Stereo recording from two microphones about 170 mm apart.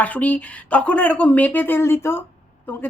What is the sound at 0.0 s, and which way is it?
Speech, 10° left (ahead or behind).